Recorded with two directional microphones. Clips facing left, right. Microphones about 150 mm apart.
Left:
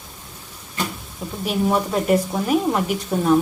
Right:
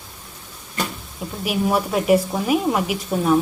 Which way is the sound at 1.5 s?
5° right (ahead or behind).